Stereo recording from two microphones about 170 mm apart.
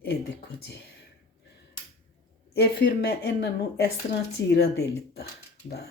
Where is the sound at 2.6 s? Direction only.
70° left (ahead or behind).